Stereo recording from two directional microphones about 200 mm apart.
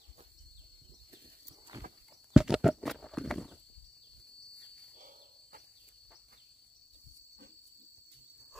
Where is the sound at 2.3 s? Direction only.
5° right (ahead or behind).